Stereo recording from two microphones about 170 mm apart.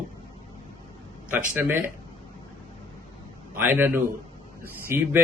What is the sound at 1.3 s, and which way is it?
Speech, 10° right (ahead or behind).